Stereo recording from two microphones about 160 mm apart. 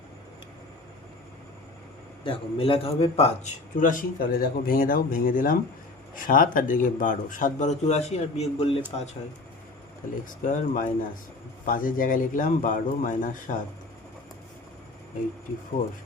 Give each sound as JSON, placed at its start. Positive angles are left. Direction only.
{"t": 2.2, "sound": "a man's voice", "side_deg": 35}
{"t": 10.2, "sound": "a man's voice", "side_deg": 55}